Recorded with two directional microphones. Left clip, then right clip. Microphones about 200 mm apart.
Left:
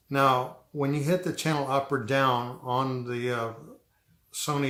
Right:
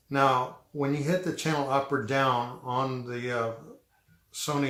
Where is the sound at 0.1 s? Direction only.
35° left (ahead or behind).